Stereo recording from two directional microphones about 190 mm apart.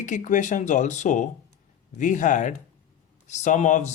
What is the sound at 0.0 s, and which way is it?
Speech, 40° left (ahead or behind).